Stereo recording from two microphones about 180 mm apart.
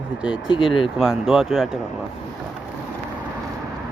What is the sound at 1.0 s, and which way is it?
Speech, 5° right (ahead or behind).